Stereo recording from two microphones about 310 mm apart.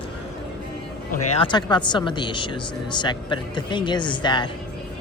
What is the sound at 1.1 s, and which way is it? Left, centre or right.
Speech, centre.